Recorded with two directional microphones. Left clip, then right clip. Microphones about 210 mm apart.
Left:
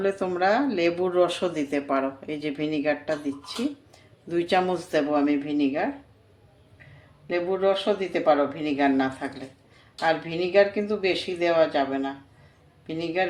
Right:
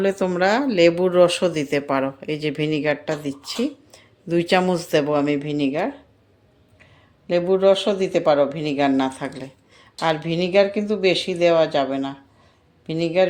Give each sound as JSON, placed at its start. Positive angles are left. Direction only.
{"t": 0.0, "sound": "speech", "side_deg": -50}
{"t": 7.3, "sound": "speech", "side_deg": -50}